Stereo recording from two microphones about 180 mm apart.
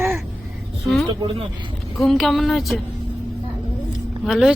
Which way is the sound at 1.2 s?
30° right (ahead or behind).